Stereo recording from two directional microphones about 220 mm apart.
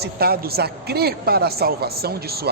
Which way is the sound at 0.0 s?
45° right (ahead or behind).